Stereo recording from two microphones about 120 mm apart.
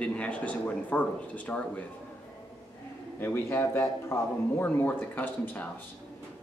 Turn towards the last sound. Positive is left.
turn(degrees=15)  # may be behind; listen again after turning